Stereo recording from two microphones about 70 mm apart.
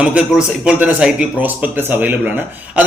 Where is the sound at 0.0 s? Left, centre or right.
Centre.